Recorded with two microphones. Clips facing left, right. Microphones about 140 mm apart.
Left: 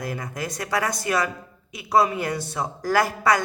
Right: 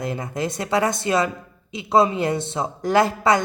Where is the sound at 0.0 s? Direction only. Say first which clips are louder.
Right 4 dB; 25° right (ahead or behind).